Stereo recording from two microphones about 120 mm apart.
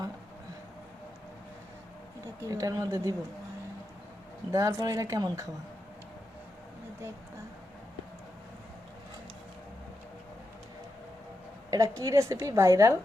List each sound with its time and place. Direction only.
2.4 s a woman's voice: 30° right (ahead or behind)
4.5 s a woman's voice: 30° right (ahead or behind)
11.7 s a woman's voice: 25° right (ahead or behind)